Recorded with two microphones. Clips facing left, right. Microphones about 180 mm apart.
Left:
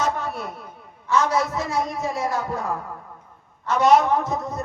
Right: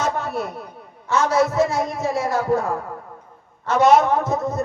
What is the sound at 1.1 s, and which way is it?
A woman's voice, 45° right (ahead or behind).